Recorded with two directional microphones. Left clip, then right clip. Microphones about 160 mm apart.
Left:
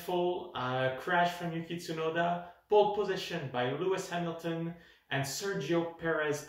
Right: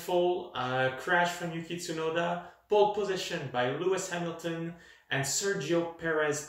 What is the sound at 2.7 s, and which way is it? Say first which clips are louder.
Speech: right 1 dB; 15° left (ahead or behind).